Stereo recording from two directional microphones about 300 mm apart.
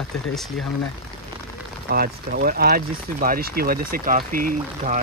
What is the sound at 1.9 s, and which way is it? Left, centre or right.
Speech, right.